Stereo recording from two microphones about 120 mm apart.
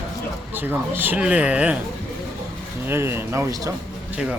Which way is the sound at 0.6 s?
15° right (ahead or behind).